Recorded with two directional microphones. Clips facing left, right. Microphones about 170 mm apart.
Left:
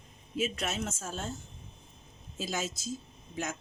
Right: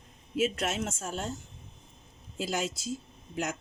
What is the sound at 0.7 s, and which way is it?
Speech, 70° right (ahead or behind).